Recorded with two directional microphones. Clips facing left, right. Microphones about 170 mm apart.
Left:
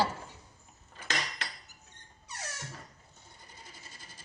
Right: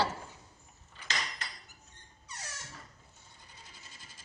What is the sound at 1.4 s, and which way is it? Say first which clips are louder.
Cutlery: left 3 dB; 75° left (ahead or behind).